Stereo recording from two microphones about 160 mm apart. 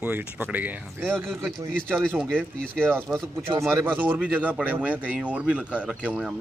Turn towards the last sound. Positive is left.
turn(degrees=-5)  # may be behind; listen again after turning